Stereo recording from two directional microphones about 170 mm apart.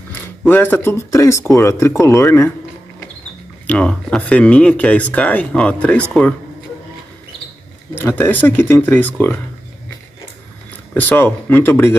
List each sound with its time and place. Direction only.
0.5 s speech: 10° left (ahead or behind)
3.6 s speech: 5° left (ahead or behind)
7.9 s speech: 10° left (ahead or behind)
11.0 s speech: 10° left (ahead or behind)